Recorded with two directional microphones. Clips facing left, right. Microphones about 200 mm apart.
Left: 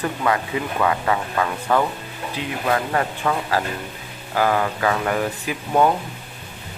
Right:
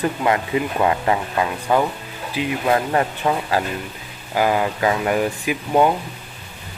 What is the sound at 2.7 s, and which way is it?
Speech, 25° right (ahead or behind).